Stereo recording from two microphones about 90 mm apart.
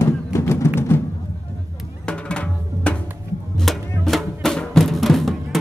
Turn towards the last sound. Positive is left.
turn(degrees=0)  # may be behind; listen again after turning